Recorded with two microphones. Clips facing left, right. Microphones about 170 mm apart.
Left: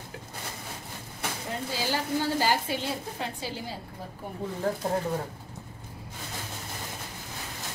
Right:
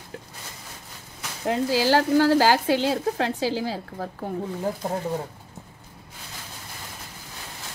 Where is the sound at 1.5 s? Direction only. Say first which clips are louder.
Right 12 dB; 90° right.